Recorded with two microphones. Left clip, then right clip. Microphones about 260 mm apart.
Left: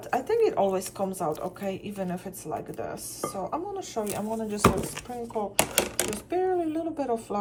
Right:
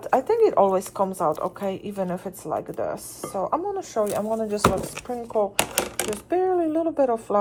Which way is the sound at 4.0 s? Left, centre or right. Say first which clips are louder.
Right 8 dB; right.